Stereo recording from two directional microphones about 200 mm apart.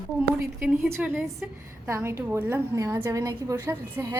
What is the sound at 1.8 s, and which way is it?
A woman's voice, 15° right (ahead or behind).